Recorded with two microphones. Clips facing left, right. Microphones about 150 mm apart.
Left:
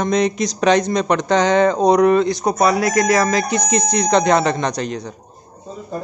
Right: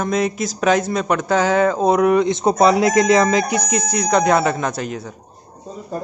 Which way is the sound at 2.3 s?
25° right (ahead or behind).